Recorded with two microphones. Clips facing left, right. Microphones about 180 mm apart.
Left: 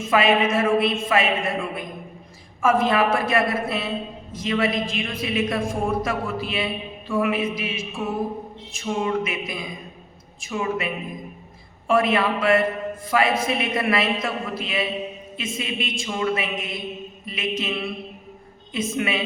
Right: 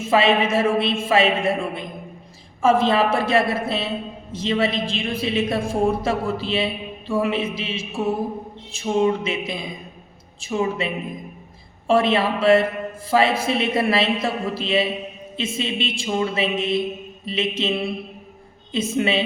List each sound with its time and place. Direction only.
0.0 s a woman's voice: 30° right (ahead or behind)